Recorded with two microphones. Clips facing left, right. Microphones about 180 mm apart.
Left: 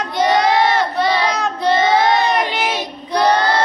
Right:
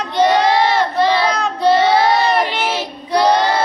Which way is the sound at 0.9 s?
10° left (ahead or behind).